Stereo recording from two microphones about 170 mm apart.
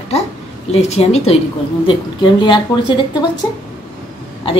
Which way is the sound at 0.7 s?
40° left (ahead or behind).